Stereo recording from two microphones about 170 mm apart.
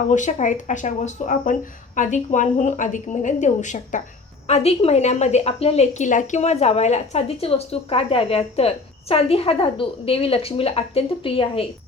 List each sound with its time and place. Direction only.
0.1 s a woman's voice: 45° left (ahead or behind); by 11.6 s 30° left (ahead or behind)